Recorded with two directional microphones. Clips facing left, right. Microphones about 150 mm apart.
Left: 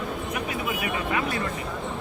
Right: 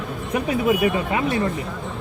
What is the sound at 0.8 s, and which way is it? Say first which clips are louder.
Speech: right 6 dB; 25° right (ahead or behind).